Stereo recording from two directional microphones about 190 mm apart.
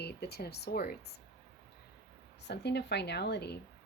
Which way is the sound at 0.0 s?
60° left (ahead or behind).